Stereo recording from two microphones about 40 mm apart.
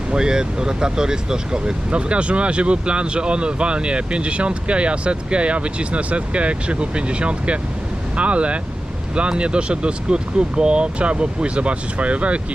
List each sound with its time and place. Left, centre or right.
0.1 s speech: centre
1.9 s speech: right